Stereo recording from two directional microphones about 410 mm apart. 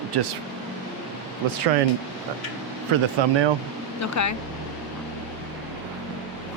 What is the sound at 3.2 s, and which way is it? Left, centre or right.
Speech, right.